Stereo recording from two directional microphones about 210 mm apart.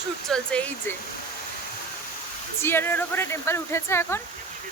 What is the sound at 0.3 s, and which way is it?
Speech, 5° left (ahead or behind).